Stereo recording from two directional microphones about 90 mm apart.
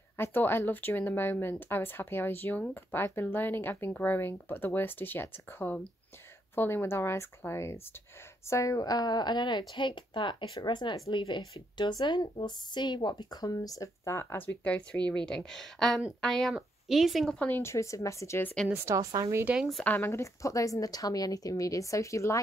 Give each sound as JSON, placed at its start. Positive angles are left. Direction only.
{"t": 0.2, "sound": "speech", "side_deg": 25}
{"t": 14.6, "sound": "speech", "side_deg": 15}
{"t": 17.5, "sound": "a woman's voice", "side_deg": 30}
{"t": 18.7, "sound": "a woman's voice", "side_deg": -25}
{"t": 19.4, "sound": "speech", "side_deg": -10}
{"t": 20.0, "sound": "a woman's voice", "side_deg": 30}